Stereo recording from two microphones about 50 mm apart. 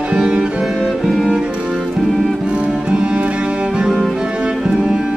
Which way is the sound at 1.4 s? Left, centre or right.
Right.